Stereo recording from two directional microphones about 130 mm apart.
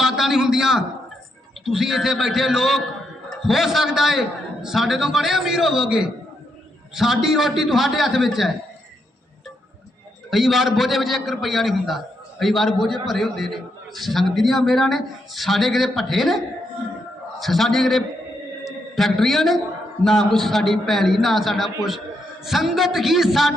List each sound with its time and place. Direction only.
0.0 s a sound: 5° right (ahead or behind)
1.6 s a man's voice: 5° right (ahead or behind)
10.2 s a man's voice: centre (ahead or behind)
17.4 s a man's voice: centre (ahead or behind)